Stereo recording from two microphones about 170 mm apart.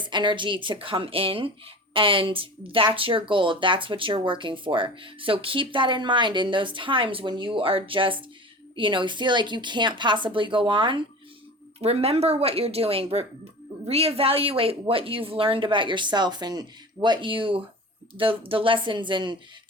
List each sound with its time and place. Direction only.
0.0 s a woman's voice: 25° right (ahead or behind)